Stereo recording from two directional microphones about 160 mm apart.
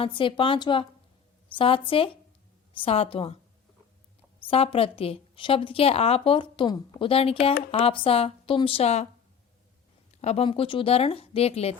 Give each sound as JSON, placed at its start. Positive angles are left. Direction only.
{"t": 0.0, "sound": "a woman's voice", "side_deg": 30}
{"t": 4.4, "sound": "a woman's voice", "side_deg": 35}
{"t": 10.2, "sound": "a woman's voice", "side_deg": 40}